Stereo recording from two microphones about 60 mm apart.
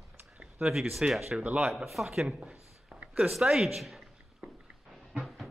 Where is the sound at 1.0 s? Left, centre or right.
Centre.